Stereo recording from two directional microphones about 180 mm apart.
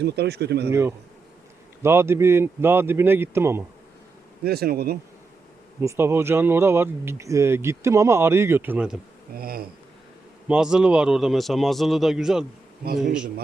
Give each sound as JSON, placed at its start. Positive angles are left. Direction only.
{"t": 0.0, "sound": "speech", "side_deg": -65}
{"t": 0.7, "sound": "speech", "side_deg": -15}
{"t": 4.4, "sound": "speech", "side_deg": -60}
{"t": 5.8, "sound": "speech", "side_deg": -15}
{"t": 9.3, "sound": "speech", "side_deg": -55}
{"t": 10.5, "sound": "a man's voice", "side_deg": -5}
{"t": 12.8, "sound": "speech", "side_deg": -55}